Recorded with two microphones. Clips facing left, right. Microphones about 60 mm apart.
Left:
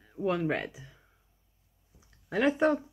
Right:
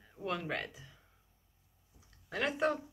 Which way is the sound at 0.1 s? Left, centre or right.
Centre.